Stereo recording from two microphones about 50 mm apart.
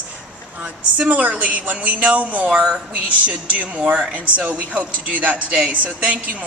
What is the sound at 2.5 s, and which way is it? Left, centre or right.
Speech, centre.